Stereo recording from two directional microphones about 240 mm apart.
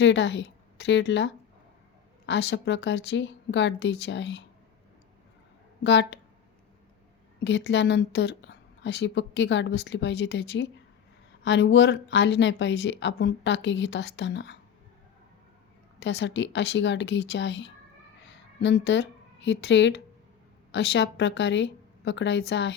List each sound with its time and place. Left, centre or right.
0.0 s a woman's voice: left
5.8 s a woman's voice: left
7.4 s a woman's voice: left
16.0 s a woman's voice: left